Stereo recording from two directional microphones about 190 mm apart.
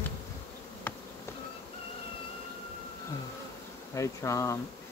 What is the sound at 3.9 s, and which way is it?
Speech, 15° left (ahead or behind).